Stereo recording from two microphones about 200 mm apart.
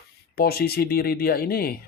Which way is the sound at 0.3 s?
50° left (ahead or behind).